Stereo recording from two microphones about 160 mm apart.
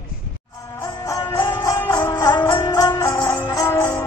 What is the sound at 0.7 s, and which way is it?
Music, 20° left (ahead or behind).